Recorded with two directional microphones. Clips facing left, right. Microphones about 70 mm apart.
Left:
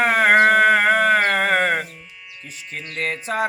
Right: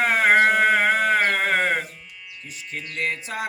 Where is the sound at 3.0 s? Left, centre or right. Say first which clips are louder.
Left 5 dB; left.